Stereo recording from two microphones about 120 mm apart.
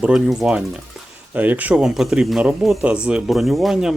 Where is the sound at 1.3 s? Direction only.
15° right (ahead or behind).